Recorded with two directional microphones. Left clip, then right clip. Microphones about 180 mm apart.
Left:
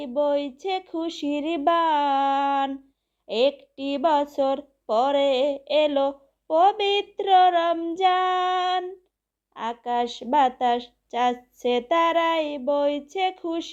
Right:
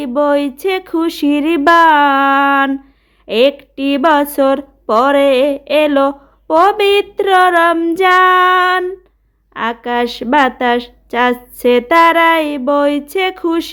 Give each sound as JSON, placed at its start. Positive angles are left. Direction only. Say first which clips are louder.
{"t": 0.0, "sound": "a woman's voice", "louder": "right 10 dB", "side_deg": -20}